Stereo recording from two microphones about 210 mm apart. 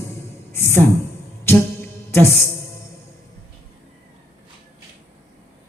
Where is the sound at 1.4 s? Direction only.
10° left (ahead or behind).